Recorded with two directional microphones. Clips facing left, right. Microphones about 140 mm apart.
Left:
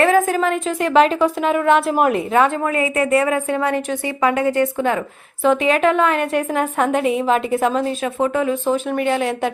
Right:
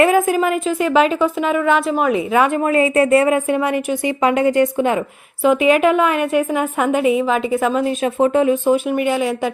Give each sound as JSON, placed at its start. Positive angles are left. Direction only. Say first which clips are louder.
{"t": 0.0, "sound": "a woman's voice", "louder": "right 1 dB", "side_deg": -15}
{"t": 2.6, "sound": "a woman's voice", "louder": "right 4 dB", "side_deg": -25}
{"t": 7.9, "sound": "speech", "louder": "right 4 dB", "side_deg": -20}